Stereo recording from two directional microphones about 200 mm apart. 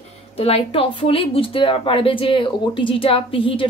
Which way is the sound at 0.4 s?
30° left (ahead or behind).